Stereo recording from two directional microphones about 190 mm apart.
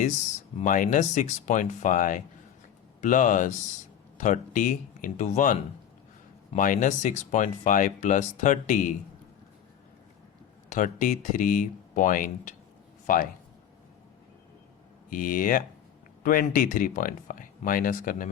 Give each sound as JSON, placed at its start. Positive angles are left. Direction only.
{"t": 0.6, "sound": "speech", "side_deg": 45}
{"t": 10.8, "sound": "speech", "side_deg": 45}
{"t": 15.1, "sound": "speech", "side_deg": 45}